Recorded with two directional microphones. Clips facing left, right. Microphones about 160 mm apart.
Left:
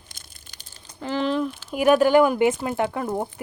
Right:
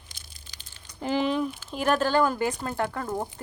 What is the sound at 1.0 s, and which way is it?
Speech, 10° right (ahead or behind).